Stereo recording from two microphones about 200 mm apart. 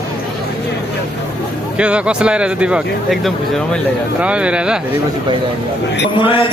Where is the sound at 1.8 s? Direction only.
5° right (ahead or behind).